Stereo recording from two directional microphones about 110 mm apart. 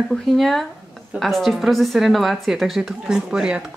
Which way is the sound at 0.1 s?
Centre (ahead or behind).